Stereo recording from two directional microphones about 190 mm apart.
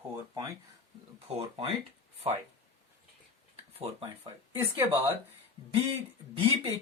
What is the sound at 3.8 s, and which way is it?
Speech, 30° right (ahead or behind).